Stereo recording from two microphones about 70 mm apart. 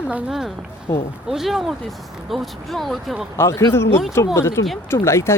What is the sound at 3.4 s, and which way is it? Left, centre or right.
Speech, left.